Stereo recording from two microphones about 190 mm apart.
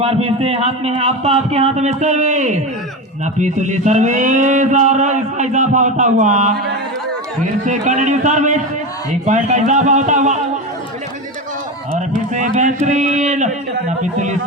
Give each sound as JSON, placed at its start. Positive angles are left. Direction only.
{"t": 0.0, "sound": "mantra", "side_deg": -30}
{"t": 7.6, "sound": "mantra", "side_deg": -40}
{"t": 11.9, "sound": "mantra", "side_deg": -40}